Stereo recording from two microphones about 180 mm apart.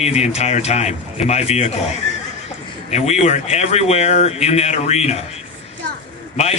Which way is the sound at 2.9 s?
35° left (ahead or behind).